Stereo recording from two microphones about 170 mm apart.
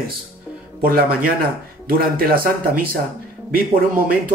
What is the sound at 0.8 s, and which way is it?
Speech, 60° right (ahead or behind).